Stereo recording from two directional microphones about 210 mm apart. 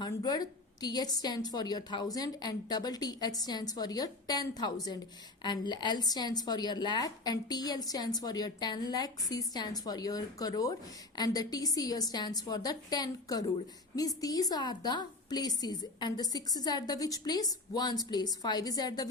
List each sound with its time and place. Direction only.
0.0 s a woman's voice: 20° left (ahead or behind)